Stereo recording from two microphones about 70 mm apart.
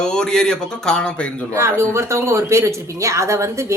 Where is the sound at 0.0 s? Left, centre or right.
Centre.